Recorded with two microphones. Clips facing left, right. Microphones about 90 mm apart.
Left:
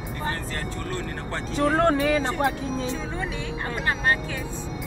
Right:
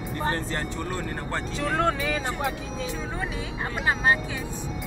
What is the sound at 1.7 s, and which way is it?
Speech, 45° left (ahead or behind).